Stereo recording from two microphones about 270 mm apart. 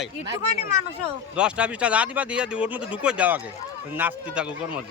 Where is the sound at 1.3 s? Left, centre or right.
Centre.